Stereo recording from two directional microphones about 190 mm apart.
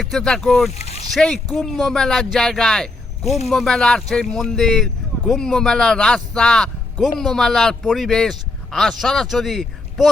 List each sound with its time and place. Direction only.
0.0 s speech: centre (ahead or behind)
0.7 s boat: 35° left (ahead or behind)
1.1 s speech: 5° left (ahead or behind)